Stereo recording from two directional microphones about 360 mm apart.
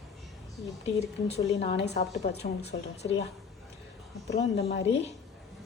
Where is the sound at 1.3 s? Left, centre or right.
Centre.